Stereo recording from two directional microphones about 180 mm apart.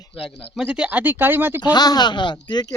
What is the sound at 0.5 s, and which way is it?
Speech, 5° right (ahead or behind).